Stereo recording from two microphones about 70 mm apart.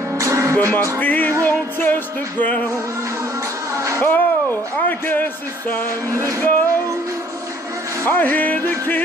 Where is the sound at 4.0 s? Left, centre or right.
Left.